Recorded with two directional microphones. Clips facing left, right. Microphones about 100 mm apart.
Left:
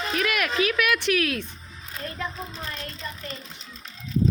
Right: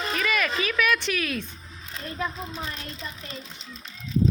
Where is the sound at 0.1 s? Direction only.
5° left (ahead or behind).